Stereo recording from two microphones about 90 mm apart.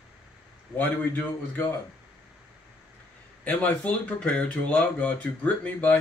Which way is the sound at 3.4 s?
15° left (ahead or behind).